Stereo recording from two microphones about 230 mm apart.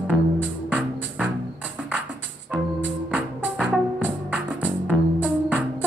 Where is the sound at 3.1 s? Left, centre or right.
Centre.